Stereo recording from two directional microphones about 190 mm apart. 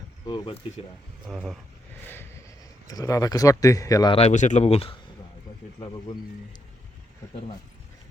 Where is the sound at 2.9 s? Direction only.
20° left (ahead or behind).